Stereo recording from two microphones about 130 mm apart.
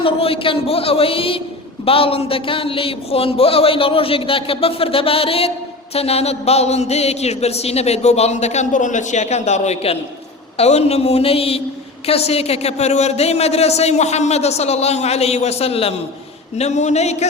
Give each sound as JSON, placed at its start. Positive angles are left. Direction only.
{"t": 0.0, "sound": "a man's voice", "side_deg": 45}
{"t": 16.6, "sound": "speech", "side_deg": 60}